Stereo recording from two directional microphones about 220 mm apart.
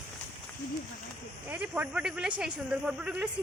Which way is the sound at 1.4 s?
5° right (ahead or behind).